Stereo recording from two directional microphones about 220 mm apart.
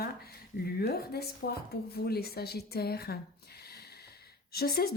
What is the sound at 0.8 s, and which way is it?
Speech, 45° left (ahead or behind).